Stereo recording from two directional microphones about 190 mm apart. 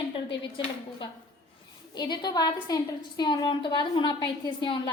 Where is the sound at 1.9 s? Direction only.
20° left (ahead or behind).